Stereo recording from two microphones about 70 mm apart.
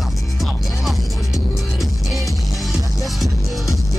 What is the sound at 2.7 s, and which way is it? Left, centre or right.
Music, centre.